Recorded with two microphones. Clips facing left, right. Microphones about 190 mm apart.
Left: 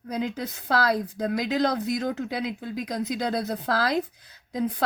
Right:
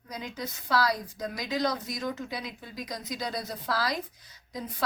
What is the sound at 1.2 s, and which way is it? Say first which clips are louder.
Speech: left 5 dB; 60° left (ahead or behind).